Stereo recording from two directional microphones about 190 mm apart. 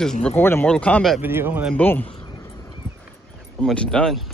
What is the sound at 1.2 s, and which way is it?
Speech, 10° right (ahead or behind).